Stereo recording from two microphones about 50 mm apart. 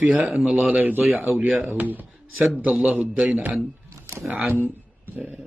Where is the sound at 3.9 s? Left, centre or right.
Right.